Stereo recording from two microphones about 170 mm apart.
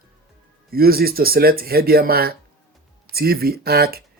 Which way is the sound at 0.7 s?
60° right (ahead or behind).